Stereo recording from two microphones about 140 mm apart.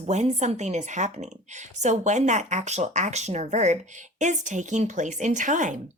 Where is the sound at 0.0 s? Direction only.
50° right (ahead or behind).